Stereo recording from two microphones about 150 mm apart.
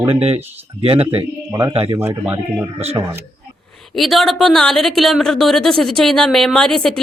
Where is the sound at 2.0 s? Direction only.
15° right (ahead or behind).